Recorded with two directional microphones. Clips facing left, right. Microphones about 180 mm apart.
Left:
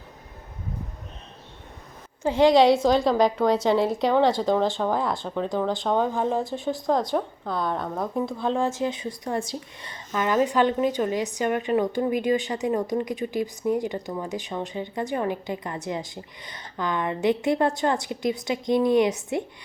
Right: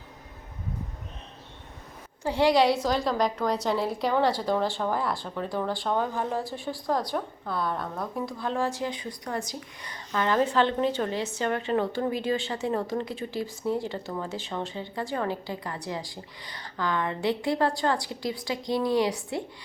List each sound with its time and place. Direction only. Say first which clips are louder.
2.2 s speech: left 5 dB; 20° left (ahead or behind)
3.1 s speech: left 6 dB; centre (ahead or behind)
4.3 s speech: left 4 dB; 20° left (ahead or behind)